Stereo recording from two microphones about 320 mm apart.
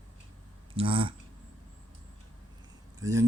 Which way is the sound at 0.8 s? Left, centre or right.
Centre.